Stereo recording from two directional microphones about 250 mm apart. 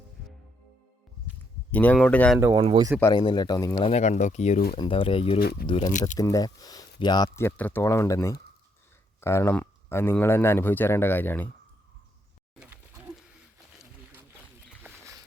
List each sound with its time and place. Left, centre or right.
1.7 s speech: centre
2.4 s speech: centre
3.0 s speech: centre
3.8 s speech: left
5.4 s speech: left
5.6 s speech: centre
5.9 s speech: left
6.1 s speech: centre
14.8 s a sound: centre